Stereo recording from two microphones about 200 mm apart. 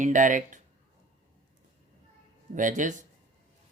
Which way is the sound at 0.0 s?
40° right (ahead or behind).